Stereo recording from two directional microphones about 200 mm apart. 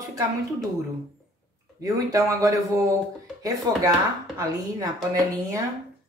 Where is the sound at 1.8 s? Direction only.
15° right (ahead or behind).